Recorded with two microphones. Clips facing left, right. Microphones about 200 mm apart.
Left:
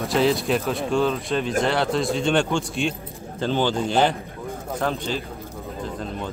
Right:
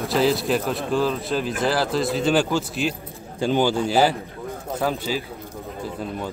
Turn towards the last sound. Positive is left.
turn(degrees=-10)  # may be behind; listen again after turning